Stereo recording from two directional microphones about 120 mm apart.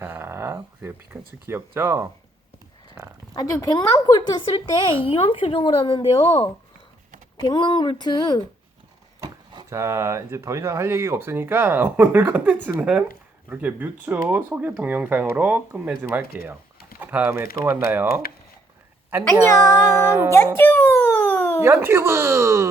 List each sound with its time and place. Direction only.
0.0 s speech: 20° right (ahead or behind)
3.3 s a woman's voice: 30° left (ahead or behind); by 6.2 s 50° left (ahead or behind)
6.2 s speech: 20° left (ahead or behind)
7.4 s speech: 35° left (ahead or behind)
9.2 s a sound: 40° right (ahead or behind)
9.6 s speech: 25° right (ahead or behind)
20.3 s a sound: 20° left (ahead or behind)
21.6 s speech: 20° right (ahead or behind)